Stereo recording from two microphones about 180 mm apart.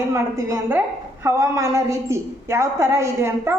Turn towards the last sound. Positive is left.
turn(degrees=-15)  # may be behind; listen again after turning